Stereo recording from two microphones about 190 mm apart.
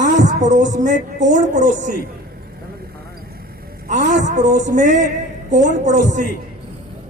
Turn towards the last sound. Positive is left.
turn(degrees=-40)  # may be behind; listen again after turning